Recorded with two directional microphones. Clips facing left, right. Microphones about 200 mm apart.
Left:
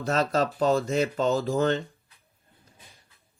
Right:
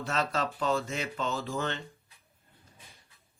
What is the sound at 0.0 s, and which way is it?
Speech, 40° left (ahead or behind).